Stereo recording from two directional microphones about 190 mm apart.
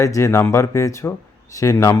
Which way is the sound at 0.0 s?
15° left (ahead or behind).